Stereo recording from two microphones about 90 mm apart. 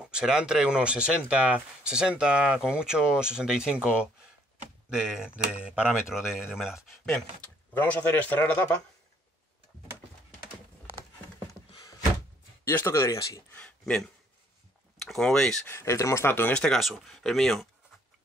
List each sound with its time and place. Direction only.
0.0 s speech: 10° right (ahead or behind)
7.7 s speech: 20° left (ahead or behind)
12.6 s speech: 30° left (ahead or behind)
13.5 s a sound: 15° left (ahead or behind)
15.0 s speech: 5° left (ahead or behind)
15.6 s speech: 30° left (ahead or behind)
16.5 s speech: 10° left (ahead or behind)